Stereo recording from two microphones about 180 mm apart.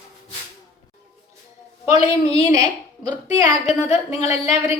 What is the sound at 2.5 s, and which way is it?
Speech, 20° right (ahead or behind).